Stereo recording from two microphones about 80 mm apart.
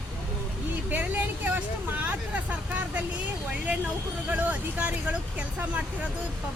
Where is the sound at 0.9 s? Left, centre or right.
Right.